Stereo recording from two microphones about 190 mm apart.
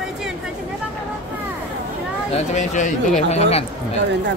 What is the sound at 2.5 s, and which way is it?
Speech, 40° left (ahead or behind).